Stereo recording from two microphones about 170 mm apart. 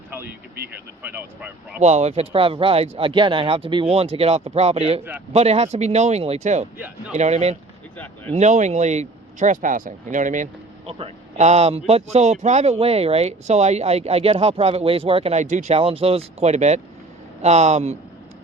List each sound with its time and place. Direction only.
1.0 s speech: 10° right (ahead or behind)
1.8 s speech: 40° right (ahead or behind)
7.9 s a sound: 10° left (ahead or behind)
8.3 s speech: 45° right (ahead or behind)
10.9 s speech: 40° right (ahead or behind)